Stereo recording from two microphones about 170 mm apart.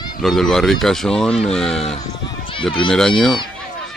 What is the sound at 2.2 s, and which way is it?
Run, 30° left (ahead or behind).